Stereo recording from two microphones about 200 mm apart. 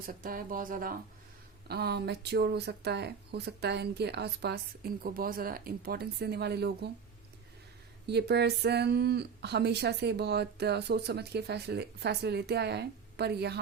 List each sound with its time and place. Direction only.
0.0 s speech: 45° right (ahead or behind)
8.0 s speech: 55° right (ahead or behind)